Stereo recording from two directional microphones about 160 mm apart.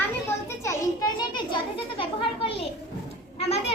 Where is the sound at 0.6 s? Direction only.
20° left (ahead or behind).